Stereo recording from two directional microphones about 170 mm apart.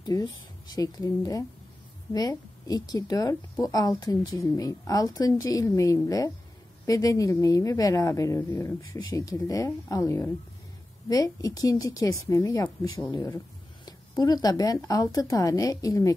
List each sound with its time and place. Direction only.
0.0 s a woman's voice: 25° left (ahead or behind)